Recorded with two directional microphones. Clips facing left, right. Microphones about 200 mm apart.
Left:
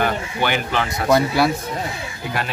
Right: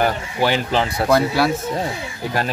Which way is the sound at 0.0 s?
35° right (ahead or behind).